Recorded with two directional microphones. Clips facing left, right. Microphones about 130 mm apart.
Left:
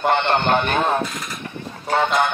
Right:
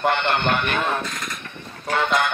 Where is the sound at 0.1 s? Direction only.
35° left (ahead or behind).